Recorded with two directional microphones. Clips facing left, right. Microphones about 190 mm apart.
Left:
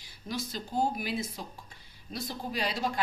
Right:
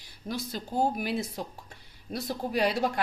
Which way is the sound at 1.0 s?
60° right (ahead or behind).